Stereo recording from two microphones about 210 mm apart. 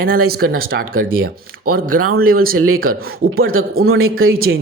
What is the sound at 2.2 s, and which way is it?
Speech, 45° right (ahead or behind).